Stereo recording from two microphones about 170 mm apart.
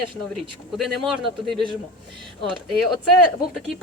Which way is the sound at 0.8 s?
Centre (ahead or behind).